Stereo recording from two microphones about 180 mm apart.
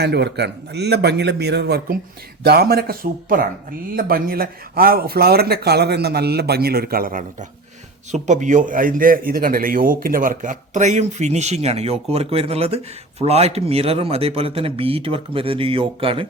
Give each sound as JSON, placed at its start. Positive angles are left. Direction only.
{"t": 0.0, "sound": "a man's voice", "side_deg": -65}